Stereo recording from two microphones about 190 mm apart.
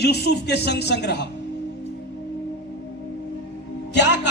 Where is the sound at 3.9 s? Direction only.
65° left (ahead or behind).